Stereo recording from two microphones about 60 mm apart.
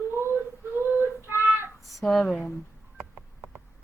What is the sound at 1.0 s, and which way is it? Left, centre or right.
Child singing, right.